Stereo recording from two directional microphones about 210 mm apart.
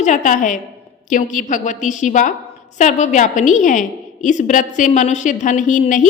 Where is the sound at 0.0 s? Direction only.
35° left (ahead or behind).